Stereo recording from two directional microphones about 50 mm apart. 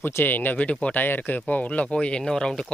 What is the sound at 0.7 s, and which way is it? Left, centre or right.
Speech, left.